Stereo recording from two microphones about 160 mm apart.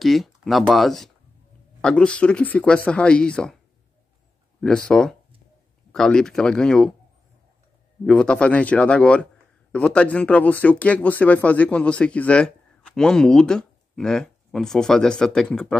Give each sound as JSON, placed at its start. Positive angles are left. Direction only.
{"t": 0.0, "sound": "a man's voice", "side_deg": 0}
{"t": 4.6, "sound": "speech", "side_deg": 5}
{"t": 8.0, "sound": "a man's voice", "side_deg": 5}